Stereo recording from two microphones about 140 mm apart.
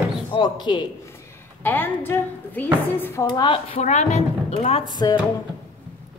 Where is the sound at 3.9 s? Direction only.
55° left (ahead or behind).